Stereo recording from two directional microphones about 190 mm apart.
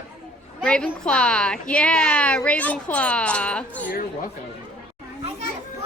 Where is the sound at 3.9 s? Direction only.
45° left (ahead or behind).